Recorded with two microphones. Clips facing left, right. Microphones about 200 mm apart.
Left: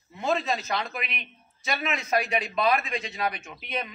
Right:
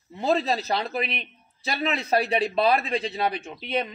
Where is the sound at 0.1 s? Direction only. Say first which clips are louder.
Right 3 dB; 35° right (ahead or behind).